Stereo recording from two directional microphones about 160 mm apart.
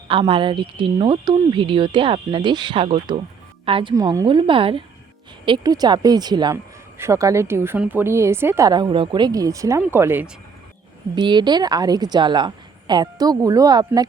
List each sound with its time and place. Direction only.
0.1 s a woman's voice: 35° right (ahead or behind)
3.9 s a woman's voice: 20° right (ahead or behind)
11.1 s a woman's voice: 30° right (ahead or behind)